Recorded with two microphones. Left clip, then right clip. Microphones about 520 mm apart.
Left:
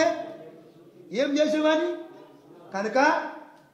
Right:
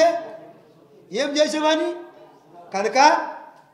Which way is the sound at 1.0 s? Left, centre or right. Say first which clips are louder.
Right 3 dB; centre.